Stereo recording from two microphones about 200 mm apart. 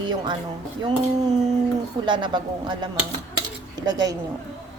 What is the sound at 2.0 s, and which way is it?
Speech, 20° right (ahead or behind).